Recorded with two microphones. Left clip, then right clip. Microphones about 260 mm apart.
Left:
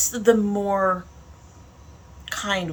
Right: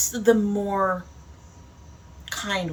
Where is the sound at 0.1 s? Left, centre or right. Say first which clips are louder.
Left 2 dB; centre.